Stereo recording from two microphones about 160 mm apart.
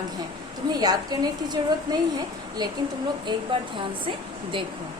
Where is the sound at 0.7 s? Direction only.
25° right (ahead or behind).